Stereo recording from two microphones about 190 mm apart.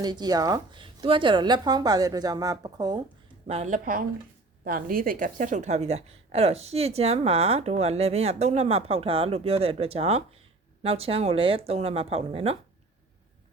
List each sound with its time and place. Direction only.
0.0 s speech: 20° right (ahead or behind)
3.4 s a woman's voice: 35° right (ahead or behind)